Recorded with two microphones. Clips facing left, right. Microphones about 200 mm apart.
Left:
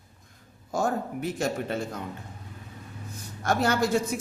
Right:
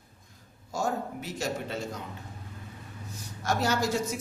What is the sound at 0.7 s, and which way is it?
A man's voice, 55° left (ahead or behind).